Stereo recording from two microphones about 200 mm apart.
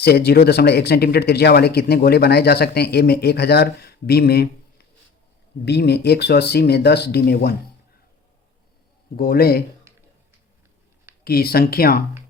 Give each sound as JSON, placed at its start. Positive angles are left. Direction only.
{"t": 0.0, "sound": "speech", "side_deg": 50}
{"t": 5.6, "sound": "speech", "side_deg": 55}
{"t": 9.1, "sound": "speech", "side_deg": 50}
{"t": 11.2, "sound": "speech", "side_deg": 50}